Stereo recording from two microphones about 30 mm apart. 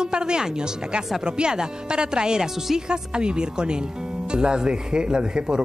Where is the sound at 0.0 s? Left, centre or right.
Right.